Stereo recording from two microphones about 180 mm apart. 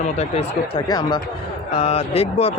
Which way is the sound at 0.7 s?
25° left (ahead or behind).